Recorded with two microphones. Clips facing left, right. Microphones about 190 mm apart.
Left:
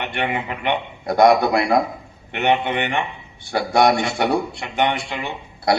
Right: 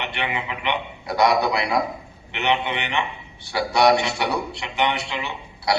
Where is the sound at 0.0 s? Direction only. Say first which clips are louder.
Left 4 dB; 50° left (ahead or behind).